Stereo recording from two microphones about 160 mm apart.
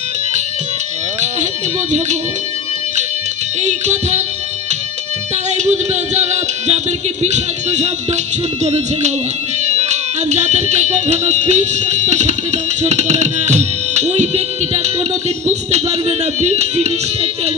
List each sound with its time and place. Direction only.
3.6 s speech: 45° right (ahead or behind)
5.5 s speech: 45° right (ahead or behind)